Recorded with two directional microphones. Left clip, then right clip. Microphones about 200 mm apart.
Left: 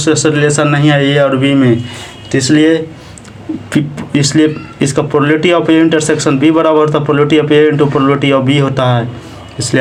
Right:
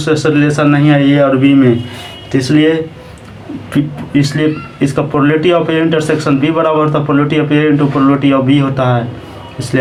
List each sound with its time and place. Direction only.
0.0 s speech: 45° left (ahead or behind)
3.7 s speech: 45° left (ahead or behind)